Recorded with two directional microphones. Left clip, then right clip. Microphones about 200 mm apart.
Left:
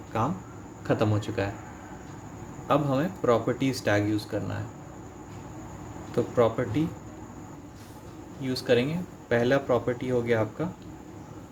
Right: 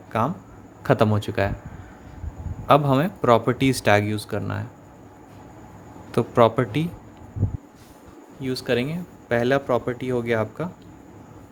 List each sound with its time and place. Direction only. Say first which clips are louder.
0.1 s a man's voice: right 5 dB; 40° right (ahead or behind)
2.6 s speech: right 7 dB; 45° right (ahead or behind)
6.1 s speech: right 6 dB; 50° right (ahead or behind)
8.4 s speech: right 1 dB; 45° right (ahead or behind)